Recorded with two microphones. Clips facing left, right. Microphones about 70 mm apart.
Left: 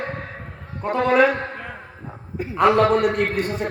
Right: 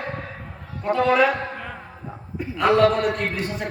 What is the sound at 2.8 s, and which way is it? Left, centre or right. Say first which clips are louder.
Speech: left 1 dB; left.